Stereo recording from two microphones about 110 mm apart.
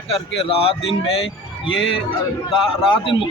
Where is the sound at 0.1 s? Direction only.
60° left (ahead or behind).